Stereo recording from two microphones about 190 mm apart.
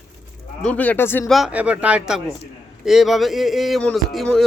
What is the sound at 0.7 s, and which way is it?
Speech, 10° left (ahead or behind).